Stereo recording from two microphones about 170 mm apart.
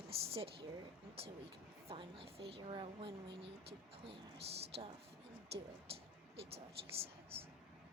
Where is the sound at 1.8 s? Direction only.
30° right (ahead or behind).